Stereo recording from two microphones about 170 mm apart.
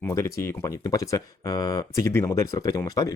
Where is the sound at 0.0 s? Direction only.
15° left (ahead or behind).